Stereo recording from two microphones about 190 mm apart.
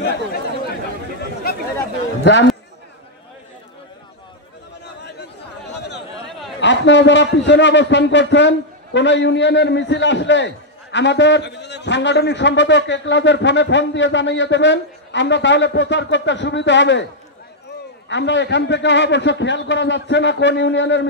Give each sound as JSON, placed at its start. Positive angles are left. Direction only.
{"t": 0.0, "sound": "chatter", "side_deg": 55}
{"t": 5.7, "sound": "a sound", "side_deg": 65}
{"t": 6.6, "sound": "a man's voice", "side_deg": 70}
{"t": 18.0, "sound": "a man's voice", "side_deg": 70}